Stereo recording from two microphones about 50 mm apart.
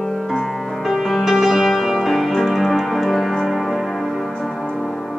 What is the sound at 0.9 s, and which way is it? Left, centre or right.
Music, centre.